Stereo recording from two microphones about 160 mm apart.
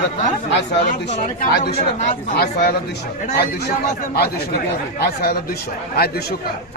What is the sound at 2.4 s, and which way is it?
Speech, 75° left (ahead or behind).